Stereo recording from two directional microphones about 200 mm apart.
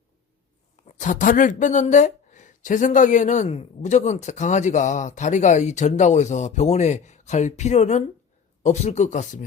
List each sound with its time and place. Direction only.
0.9 s speech: 40° left (ahead or behind)